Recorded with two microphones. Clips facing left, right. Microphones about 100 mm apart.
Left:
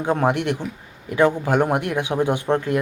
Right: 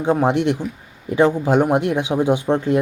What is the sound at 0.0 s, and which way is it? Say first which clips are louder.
A man's voice: right 3 dB; 15° right (ahead or behind).